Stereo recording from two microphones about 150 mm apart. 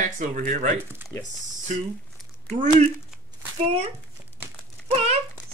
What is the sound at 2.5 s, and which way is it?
Speech, 55° right (ahead or behind).